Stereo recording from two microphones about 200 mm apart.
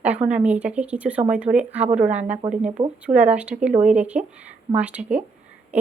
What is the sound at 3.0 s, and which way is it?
A woman's voice, 5° right (ahead or behind).